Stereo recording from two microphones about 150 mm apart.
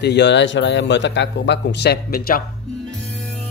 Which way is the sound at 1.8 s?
85° left.